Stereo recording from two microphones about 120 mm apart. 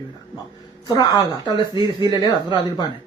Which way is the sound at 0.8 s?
30° left (ahead or behind).